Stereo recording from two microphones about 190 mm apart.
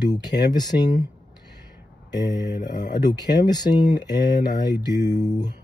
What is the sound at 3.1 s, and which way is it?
Speech, 20° left (ahead or behind).